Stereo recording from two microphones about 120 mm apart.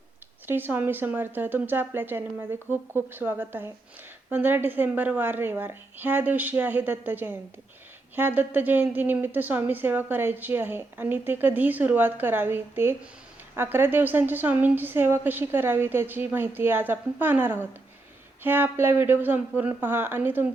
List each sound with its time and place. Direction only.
0.4 s a woman's voice: 15° right (ahead or behind)